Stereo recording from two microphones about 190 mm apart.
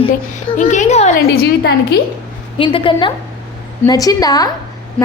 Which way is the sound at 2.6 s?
25° left (ahead or behind).